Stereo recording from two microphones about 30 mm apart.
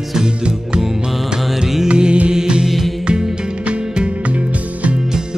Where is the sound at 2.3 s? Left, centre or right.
Right.